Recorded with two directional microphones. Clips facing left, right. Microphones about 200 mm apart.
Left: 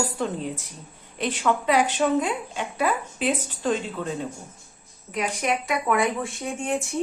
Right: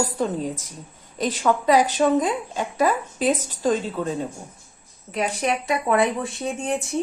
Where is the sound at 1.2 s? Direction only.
40° right (ahead or behind).